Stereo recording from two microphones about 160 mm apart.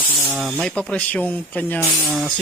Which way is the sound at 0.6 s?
5° left (ahead or behind).